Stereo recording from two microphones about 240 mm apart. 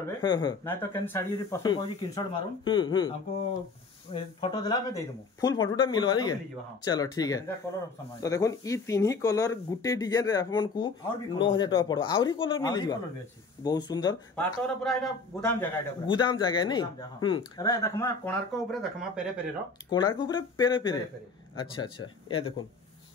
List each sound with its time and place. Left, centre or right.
0.2 s speech: centre
16.1 s speech: centre
18.7 s speech: centre
19.9 s speech: centre